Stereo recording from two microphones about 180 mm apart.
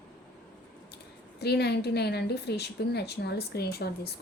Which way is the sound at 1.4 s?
65° left (ahead or behind).